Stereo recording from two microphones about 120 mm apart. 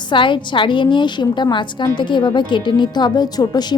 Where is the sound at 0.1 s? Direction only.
40° left (ahead or behind).